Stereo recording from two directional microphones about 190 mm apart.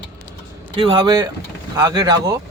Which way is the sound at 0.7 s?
25° right (ahead or behind).